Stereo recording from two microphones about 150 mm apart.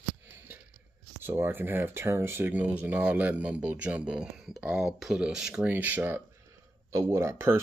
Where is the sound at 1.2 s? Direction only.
15° right (ahead or behind).